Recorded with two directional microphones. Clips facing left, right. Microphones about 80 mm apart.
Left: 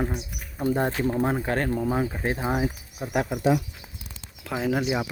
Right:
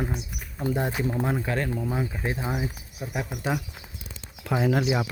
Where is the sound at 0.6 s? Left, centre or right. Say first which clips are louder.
Left 3 dB; left.